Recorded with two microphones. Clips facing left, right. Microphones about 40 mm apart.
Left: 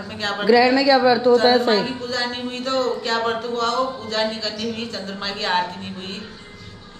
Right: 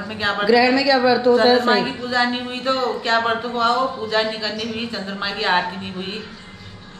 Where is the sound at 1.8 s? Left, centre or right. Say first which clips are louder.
Right 4 dB; right.